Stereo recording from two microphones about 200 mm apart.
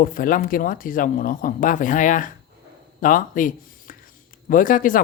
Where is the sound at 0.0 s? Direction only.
45° left (ahead or behind).